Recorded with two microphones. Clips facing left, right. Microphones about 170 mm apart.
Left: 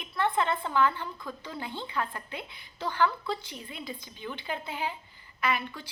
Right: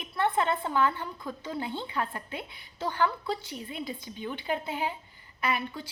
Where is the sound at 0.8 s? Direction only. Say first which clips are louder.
Even; 25° right (ahead or behind).